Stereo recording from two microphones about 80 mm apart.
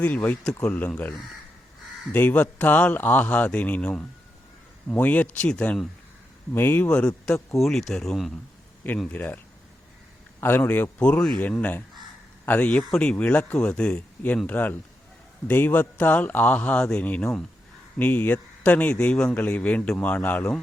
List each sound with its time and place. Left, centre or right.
0.0 s speech: left
2.1 s speech: centre
6.5 s speech: left
6.8 s speech: centre
7.5 s speech: centre
9.1 s speech: left
10.4 s speech: left
11.0 s speech: centre
12.5 s speech: centre